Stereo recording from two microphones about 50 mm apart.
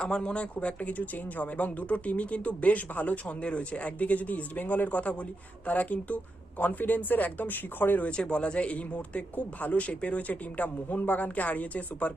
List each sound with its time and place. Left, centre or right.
0.0 s speech: centre; by 8.0 s left
8.0 s speech: centre